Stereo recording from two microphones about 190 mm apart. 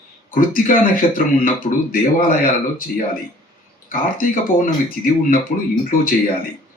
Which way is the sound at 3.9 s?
45° left (ahead or behind).